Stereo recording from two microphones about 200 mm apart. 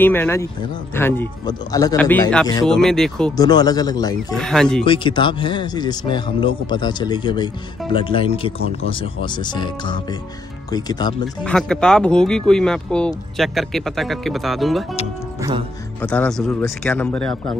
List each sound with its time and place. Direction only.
0.0 s speech: 10° left (ahead or behind)
2.0 s speech: 10° left (ahead or behind)
2.6 s speech: centre (ahead or behind)
3.3 s speech: 20° left (ahead or behind)
4.4 s speech: 5° left (ahead or behind)
4.8 s speech: 25° left (ahead or behind)
11.4 s speech: 5° left (ahead or behind)
16.0 s speech: 10° left (ahead or behind)